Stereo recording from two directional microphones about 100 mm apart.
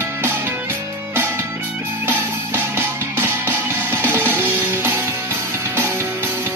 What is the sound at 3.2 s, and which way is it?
Music, 25° right (ahead or behind).